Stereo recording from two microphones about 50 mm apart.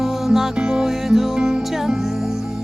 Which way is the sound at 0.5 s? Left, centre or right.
Centre.